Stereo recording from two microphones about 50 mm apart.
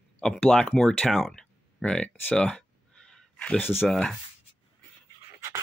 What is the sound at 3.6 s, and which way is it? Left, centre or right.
Speech, left.